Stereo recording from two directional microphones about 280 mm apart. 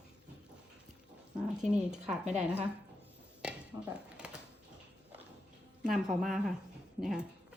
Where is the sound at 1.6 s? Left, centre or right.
Centre.